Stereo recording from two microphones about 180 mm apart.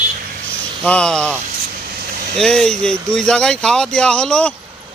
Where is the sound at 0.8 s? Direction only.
5° left (ahead or behind).